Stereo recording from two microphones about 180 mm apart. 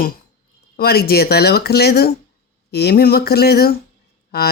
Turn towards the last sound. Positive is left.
turn(degrees=60)  # may be behind; listen again after turning